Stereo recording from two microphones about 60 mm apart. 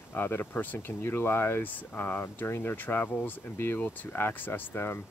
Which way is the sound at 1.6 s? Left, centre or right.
Left.